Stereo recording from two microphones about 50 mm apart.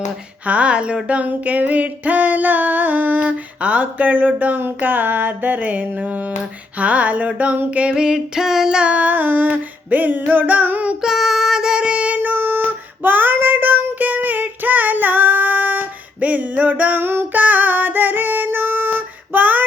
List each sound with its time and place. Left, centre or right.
0.4 s a sound: right
11.0 s child singing: centre; by 12.3 s right
12.3 s child singing: right
17.4 s female singing: right